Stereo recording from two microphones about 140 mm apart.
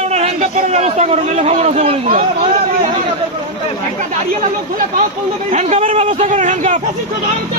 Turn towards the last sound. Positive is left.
turn(degrees=-60)  # may be behind; listen again after turning